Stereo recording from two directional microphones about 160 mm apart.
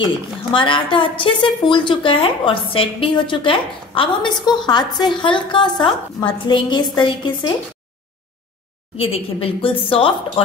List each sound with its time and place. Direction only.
0.5 s a woman's voice: 30° left (ahead or behind)
8.9 s a woman's voice: 35° left (ahead or behind)